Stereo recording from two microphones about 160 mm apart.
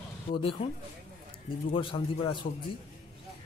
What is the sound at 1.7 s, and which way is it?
Speech, 30° left (ahead or behind).